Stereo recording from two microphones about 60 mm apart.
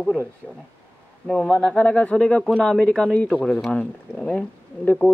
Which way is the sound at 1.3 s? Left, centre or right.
Centre.